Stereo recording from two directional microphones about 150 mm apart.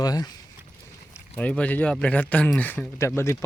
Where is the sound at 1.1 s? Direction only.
10° left (ahead or behind).